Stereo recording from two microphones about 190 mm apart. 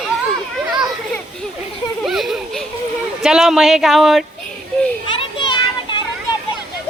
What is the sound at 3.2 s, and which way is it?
Speech, centre (ahead or behind).